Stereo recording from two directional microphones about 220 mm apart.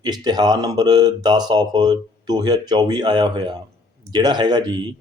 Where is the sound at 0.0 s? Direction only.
20° right (ahead or behind).